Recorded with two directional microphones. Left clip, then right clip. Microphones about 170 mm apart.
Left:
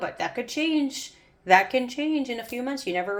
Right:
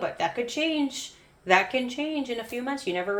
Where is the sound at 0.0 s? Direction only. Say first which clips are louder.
Right 2 dB; 35° left (ahead or behind).